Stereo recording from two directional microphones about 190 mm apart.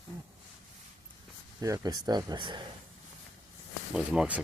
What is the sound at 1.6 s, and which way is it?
Speech, 20° right (ahead or behind).